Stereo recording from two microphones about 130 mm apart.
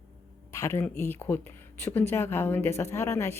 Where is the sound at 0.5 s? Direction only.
20° left (ahead or behind).